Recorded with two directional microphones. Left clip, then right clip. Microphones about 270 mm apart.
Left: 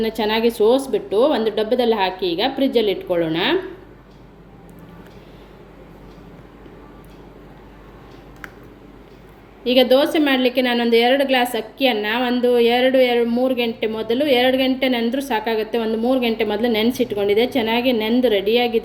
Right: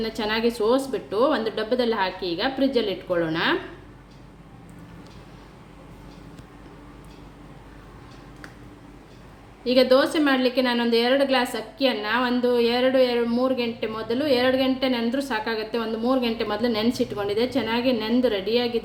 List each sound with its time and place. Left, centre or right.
0.0 s a woman's voice: centre
9.7 s a woman's voice: centre
12.5 s a woman's voice: right
12.8 s a woman's voice: centre
15.2 s a woman's voice: centre
15.7 s a woman's voice: centre